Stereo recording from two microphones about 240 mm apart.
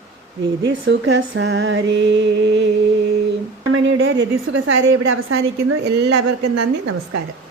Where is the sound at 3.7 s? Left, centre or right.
Right.